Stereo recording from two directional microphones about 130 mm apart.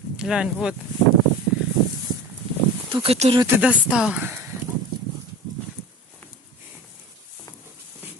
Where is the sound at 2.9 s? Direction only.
40° right (ahead or behind).